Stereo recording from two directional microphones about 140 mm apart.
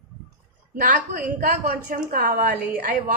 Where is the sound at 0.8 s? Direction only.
80° right.